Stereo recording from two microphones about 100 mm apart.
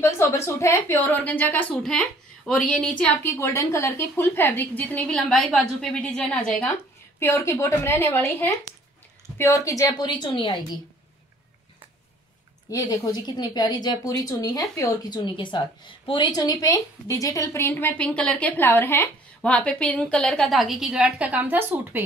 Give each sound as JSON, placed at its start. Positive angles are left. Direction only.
{"t": 0.0, "sound": "a woman's voice", "side_deg": 30}
{"t": 3.3, "sound": "a woman's voice", "side_deg": 25}
{"t": 5.1, "sound": "a woman's voice", "side_deg": 5}
{"t": 7.2, "sound": "a woman's voice", "side_deg": 25}
{"t": 9.4, "sound": "a woman's voice", "side_deg": 35}
{"t": 12.9, "sound": "a woman's voice", "side_deg": 40}
{"t": 17.6, "sound": "a woman's voice", "side_deg": 20}
{"t": 19.4, "sound": "a woman's voice", "side_deg": 10}